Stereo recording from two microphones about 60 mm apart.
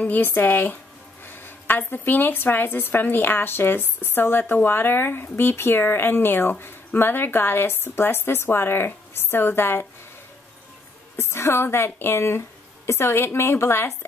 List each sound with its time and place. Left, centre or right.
0.0 s speech: left
11.1 s a woman's voice: left